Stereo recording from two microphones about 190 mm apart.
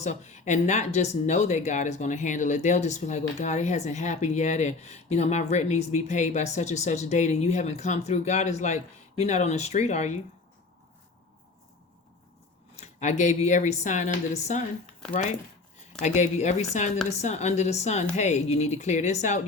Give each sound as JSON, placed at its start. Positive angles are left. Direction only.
{"t": 0.0, "sound": "speech", "side_deg": 35}
{"t": 12.7, "sound": "speech", "side_deg": 40}
{"t": 16.0, "sound": "speech", "side_deg": 35}